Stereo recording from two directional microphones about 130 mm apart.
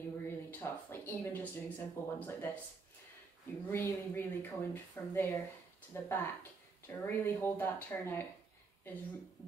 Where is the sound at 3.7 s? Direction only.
20° left (ahead or behind).